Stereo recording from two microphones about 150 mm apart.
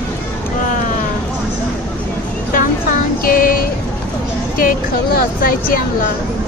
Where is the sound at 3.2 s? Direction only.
75° left (ahead or behind).